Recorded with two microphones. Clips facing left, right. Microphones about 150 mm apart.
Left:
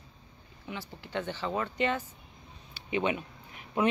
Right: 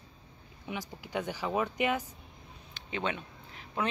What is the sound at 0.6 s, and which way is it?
Speech, 15° right (ahead or behind).